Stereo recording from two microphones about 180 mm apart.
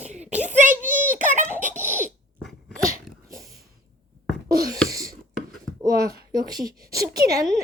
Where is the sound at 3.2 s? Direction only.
20° right (ahead or behind).